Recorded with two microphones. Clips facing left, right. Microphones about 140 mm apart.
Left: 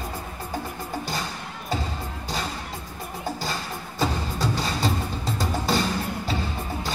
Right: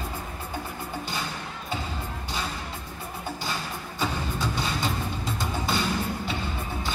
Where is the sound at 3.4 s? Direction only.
40° left (ahead or behind).